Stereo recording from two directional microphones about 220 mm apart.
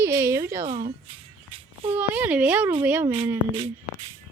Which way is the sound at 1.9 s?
5° right (ahead or behind).